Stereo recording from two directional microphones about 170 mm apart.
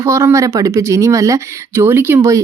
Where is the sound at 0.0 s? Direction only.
15° right (ahead or behind).